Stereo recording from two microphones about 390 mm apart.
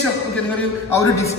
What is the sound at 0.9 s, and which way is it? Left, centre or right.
Speech, centre.